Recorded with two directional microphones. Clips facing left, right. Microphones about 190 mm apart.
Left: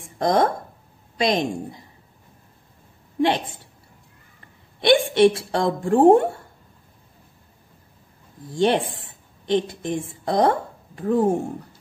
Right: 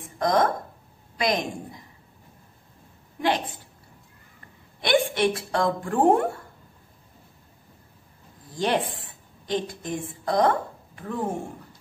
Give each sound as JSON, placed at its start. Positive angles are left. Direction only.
{"t": 0.2, "sound": "a woman's voice", "side_deg": 30}
{"t": 3.2, "sound": "a woman's voice", "side_deg": 25}
{"t": 4.8, "sound": "a woman's voice", "side_deg": 25}
{"t": 8.5, "sound": "a woman's voice", "side_deg": 25}